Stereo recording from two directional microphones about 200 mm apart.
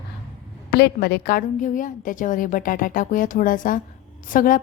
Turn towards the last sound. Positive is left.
turn(degrees=45)  # may be behind; listen again after turning